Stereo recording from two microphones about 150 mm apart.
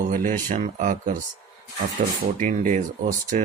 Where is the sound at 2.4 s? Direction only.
60° right (ahead or behind).